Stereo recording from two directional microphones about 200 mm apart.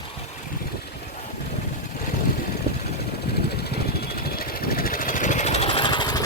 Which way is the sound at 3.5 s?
55° left (ahead or behind).